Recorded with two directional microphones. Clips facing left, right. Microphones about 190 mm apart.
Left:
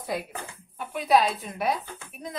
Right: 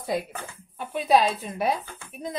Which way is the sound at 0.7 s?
25° right (ahead or behind).